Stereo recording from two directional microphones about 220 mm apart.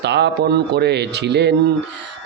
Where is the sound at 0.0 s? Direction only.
50° right (ahead or behind).